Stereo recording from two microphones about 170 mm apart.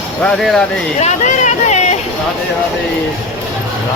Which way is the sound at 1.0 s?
45° left (ahead or behind).